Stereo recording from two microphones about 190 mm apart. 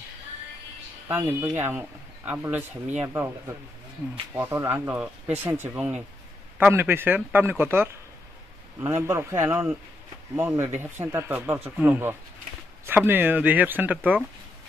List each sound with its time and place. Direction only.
1.0 s speech: 15° right (ahead or behind)
9.0 s speech: 15° right (ahead or behind)